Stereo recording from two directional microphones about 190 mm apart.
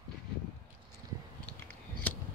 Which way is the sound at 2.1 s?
10° left (ahead or behind).